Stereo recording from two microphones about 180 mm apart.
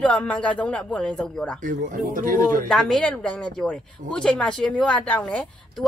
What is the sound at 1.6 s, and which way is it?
Speech, 45° right (ahead or behind).